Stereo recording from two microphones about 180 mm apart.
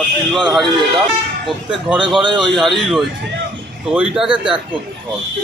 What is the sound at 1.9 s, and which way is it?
Speech, 25° right (ahead or behind).